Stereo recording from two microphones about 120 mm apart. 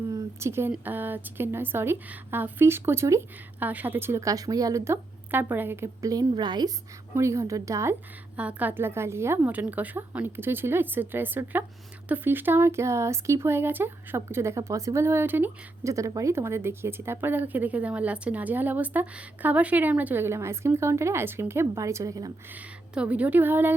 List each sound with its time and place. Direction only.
0.1 s a sound: 25° right (ahead or behind)
0.7 s speech: 15° right (ahead or behind)
5.3 s speech: 15° right (ahead or behind); by 6.7 s 35° right (ahead or behind)
7.1 s speech: 25° right (ahead or behind)
8.4 s a woman's voice: 10° right (ahead or behind); by 22.3 s 30° right (ahead or behind)
22.5 s a woman's voice: 10° right (ahead or behind)